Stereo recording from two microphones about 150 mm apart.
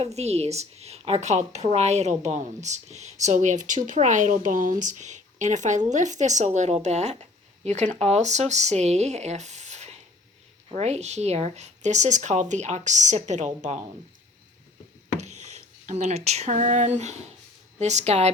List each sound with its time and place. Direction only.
0.0 s speech: 45° right (ahead or behind)
15.2 s speech: 50° right (ahead or behind)